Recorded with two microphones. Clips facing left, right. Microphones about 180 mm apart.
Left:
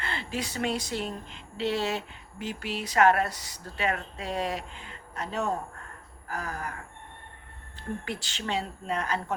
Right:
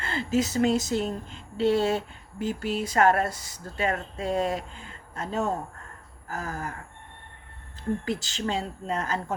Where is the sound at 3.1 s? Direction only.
25° right (ahead or behind).